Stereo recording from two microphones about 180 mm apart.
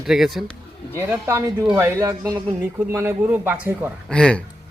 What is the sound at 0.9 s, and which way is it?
A man's voice, 15° right (ahead or behind).